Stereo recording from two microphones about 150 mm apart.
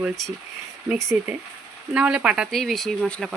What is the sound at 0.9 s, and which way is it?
Speech, 20° right (ahead or behind).